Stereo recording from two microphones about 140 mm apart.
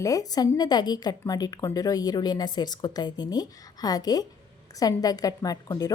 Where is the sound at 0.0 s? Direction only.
25° left (ahead or behind).